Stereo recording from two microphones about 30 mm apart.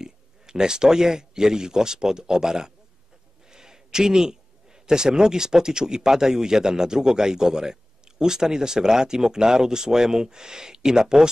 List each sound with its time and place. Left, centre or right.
0.0 s a man's voice: right